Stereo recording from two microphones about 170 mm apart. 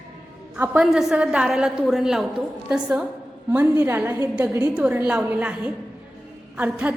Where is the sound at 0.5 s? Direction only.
10° right (ahead or behind).